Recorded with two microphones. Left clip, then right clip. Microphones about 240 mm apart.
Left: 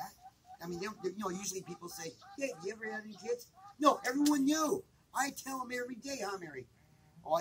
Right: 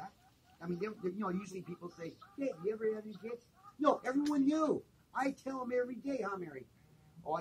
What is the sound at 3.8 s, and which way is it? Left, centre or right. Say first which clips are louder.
Speech: left 3 dB; left.